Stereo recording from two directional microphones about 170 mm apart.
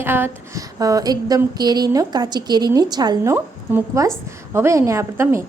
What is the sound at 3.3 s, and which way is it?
A woman's voice, 10° right (ahead or behind).